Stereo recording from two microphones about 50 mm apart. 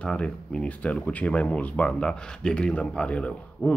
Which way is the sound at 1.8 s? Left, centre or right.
Centre.